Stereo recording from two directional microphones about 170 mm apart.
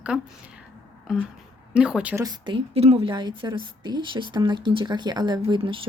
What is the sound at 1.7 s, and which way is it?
Speech, 5° right (ahead or behind).